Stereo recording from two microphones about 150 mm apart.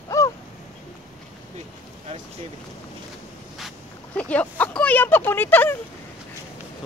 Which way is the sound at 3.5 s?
5° left (ahead or behind).